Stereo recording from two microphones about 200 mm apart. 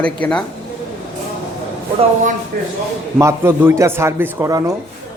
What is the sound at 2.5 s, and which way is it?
Speech, 45° right (ahead or behind).